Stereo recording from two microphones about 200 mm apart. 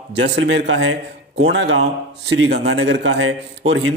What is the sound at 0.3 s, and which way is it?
A man's voice, 60° right (ahead or behind).